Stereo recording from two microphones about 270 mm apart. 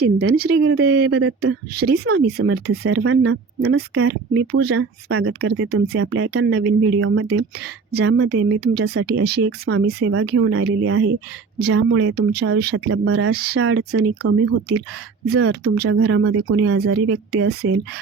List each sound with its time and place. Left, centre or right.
0.0 s speech: right
0.5 s speech: right
1.7 s speech: right
2.2 s speech: right
6.6 s speech: right
7.9 s speech: right
9.6 s speech: right
13.6 s speech: right
17.3 s speech: right